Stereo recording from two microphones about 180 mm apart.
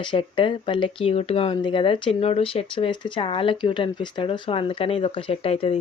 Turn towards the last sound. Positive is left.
turn(degrees=30)  # may be behind; listen again after turning